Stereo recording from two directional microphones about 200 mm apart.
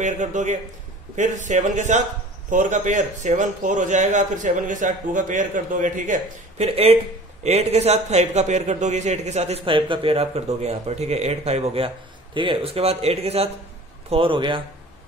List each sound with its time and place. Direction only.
0.0 s a man's voice: 35° right (ahead or behind)